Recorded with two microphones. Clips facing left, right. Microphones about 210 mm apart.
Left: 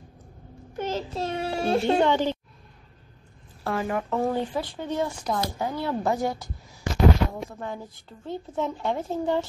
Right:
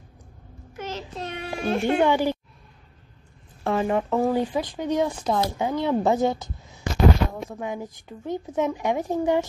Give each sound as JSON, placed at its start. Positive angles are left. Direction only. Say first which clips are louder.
{"t": 0.7, "sound": "a child's voice", "louder": "left 4 dB", "side_deg": 30}
{"t": 2.0, "sound": "a woman's voice", "louder": "right 1 dB", "side_deg": -10}
{"t": 3.6, "sound": "a woman's voice", "louder": "right 4 dB", "side_deg": -25}